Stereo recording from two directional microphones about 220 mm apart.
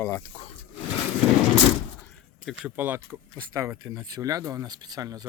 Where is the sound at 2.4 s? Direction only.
5° right (ahead or behind).